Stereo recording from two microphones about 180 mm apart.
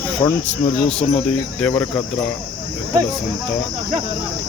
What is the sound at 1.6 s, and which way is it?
Cricket, 5° left (ahead or behind).